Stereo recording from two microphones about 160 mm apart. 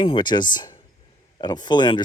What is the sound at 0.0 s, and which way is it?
Speech, 30° left (ahead or behind).